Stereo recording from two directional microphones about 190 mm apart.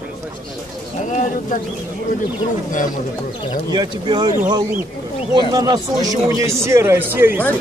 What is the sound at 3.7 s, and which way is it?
Speech, 20° right (ahead or behind).